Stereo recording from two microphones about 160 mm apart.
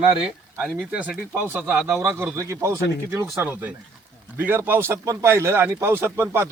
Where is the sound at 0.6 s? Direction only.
5° right (ahead or behind).